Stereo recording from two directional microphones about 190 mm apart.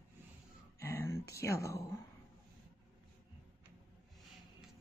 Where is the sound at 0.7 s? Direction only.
15° left (ahead or behind).